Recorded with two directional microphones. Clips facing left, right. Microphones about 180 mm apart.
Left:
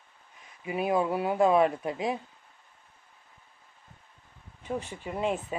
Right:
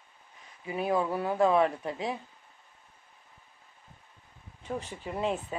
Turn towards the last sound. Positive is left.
turn(degrees=10)  # may be behind; listen again after turning